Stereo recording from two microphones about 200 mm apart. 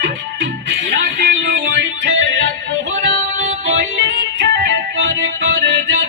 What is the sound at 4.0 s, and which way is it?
Music, 65° right (ahead or behind).